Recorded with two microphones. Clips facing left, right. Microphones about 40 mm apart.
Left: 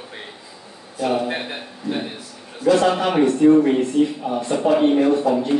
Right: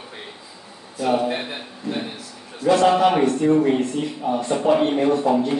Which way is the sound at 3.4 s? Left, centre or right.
Centre.